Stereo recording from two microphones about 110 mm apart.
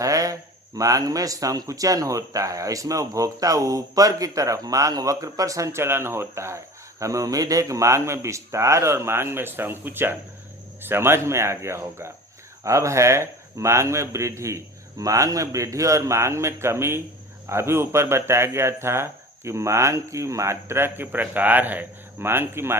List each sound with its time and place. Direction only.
0.0 s a man's voice: 30° right (ahead or behind)